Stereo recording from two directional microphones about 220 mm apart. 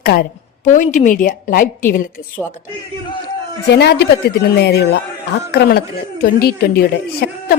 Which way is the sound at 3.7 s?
50° left (ahead or behind).